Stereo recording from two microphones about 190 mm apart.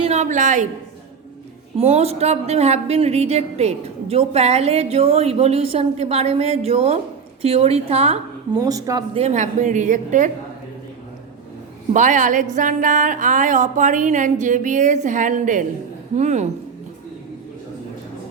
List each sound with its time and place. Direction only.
0.0 s a woman's voice: 35° right (ahead or behind)
1.8 s a woman's voice: 35° right (ahead or behind)
8.5 s speech: 20° right (ahead or behind)
9.1 s a woman's voice: 35° right (ahead or behind)
11.9 s a woman's voice: 40° right (ahead or behind)